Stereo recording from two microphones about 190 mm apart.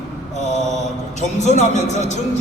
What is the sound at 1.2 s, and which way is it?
A man's voice, 40° left (ahead or behind).